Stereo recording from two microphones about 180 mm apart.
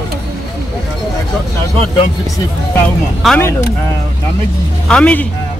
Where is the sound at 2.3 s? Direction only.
15° left (ahead or behind).